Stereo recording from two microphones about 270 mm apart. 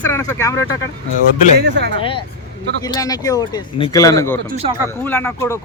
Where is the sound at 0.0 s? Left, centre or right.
Centre.